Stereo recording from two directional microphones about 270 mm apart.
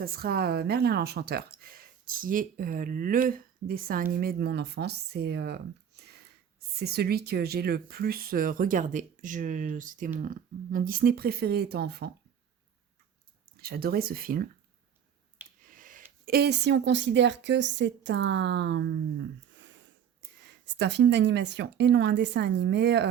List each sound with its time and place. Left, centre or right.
0.0 s speech: right
13.6 s speech: right
15.6 s a sound: right
16.2 s speech: right
19.5 s sniff: right
20.5 s speech: right